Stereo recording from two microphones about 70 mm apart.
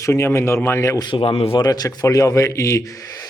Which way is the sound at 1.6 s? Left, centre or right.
Left.